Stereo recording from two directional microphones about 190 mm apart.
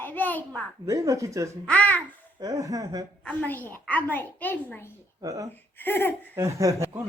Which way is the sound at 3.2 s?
10° left (ahead or behind).